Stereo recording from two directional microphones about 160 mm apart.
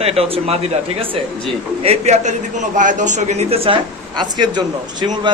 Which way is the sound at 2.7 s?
50° right (ahead or behind).